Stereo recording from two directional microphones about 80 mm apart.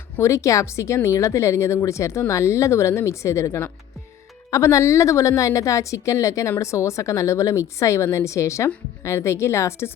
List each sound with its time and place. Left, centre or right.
0.2 s speech: left